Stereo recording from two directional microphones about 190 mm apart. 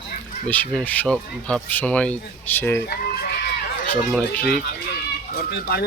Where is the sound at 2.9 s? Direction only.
55° left (ahead or behind).